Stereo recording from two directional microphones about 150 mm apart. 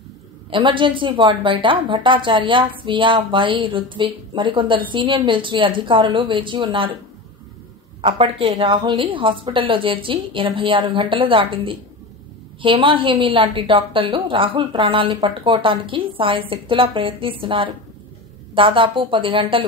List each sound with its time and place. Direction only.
0.5 s a woman's voice: 35° right (ahead or behind)
8.0 s a woman's voice: 40° right (ahead or behind)